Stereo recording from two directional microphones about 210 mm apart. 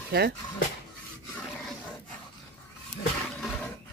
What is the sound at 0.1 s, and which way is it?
Speech, 50° right (ahead or behind).